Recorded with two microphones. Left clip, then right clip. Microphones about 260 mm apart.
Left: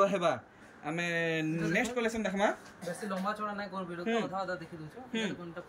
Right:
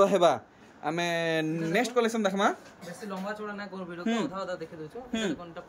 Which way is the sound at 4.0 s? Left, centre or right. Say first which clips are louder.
Right 2 dB; right.